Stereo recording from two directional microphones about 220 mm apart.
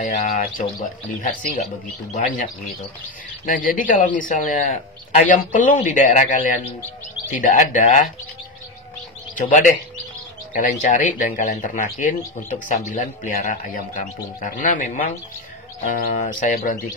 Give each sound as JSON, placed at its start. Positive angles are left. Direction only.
{"t": 0.0, "sound": "speech", "side_deg": 35}
{"t": 9.4, "sound": "speech", "side_deg": 35}